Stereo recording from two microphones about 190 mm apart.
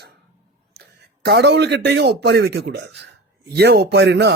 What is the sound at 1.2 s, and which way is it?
Speech, 60° right (ahead or behind).